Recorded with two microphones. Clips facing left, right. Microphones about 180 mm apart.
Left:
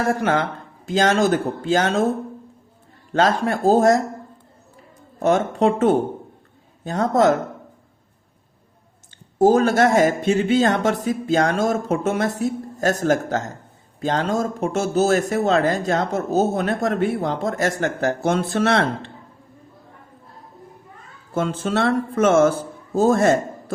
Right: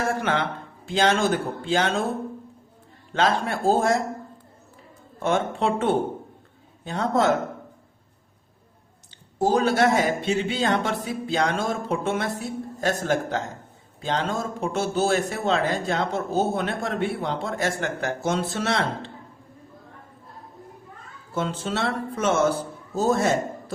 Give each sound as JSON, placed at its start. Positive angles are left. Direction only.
{"t": 0.1, "sound": "speech", "side_deg": 40}
{"t": 3.1, "sound": "speech", "side_deg": 40}
{"t": 5.2, "sound": "speech", "side_deg": 40}
{"t": 9.4, "sound": "speech", "side_deg": 45}
{"t": 21.3, "sound": "a man's voice", "side_deg": 50}